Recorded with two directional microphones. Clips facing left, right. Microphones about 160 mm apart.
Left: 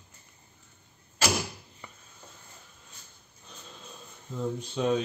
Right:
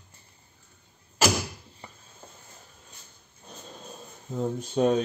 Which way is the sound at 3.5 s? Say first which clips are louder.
Right 5 dB; 45° right (ahead or behind).